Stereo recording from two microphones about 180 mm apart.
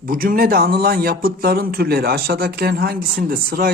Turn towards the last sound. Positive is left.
turn(degrees=-55)  # may be behind; listen again after turning